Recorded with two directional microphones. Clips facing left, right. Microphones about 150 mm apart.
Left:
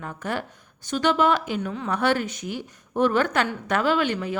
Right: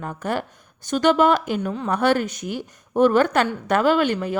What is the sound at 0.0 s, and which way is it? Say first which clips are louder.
A woman's voice: right 4 dB; 40° right (ahead or behind).